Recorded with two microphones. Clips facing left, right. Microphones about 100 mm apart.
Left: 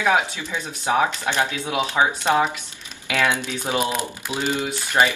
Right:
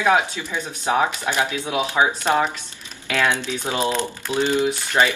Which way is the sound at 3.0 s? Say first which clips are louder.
Right 1 dB; 15° left (ahead or behind).